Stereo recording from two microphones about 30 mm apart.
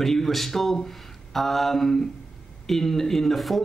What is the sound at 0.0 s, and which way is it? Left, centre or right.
Speech, centre.